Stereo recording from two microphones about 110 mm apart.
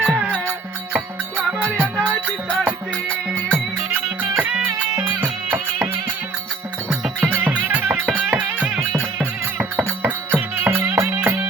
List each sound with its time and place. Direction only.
0.0 s music: 10° right (ahead or behind)
1.7 s music: 20° right (ahead or behind)
7.0 s music: 10° right (ahead or behind)